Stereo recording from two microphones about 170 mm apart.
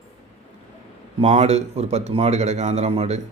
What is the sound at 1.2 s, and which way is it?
A man's voice, 40° right (ahead or behind).